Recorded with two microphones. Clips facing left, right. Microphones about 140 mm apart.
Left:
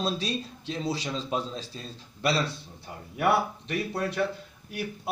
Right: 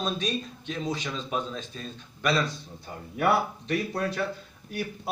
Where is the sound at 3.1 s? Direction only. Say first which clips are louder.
Even; 5° left (ahead or behind).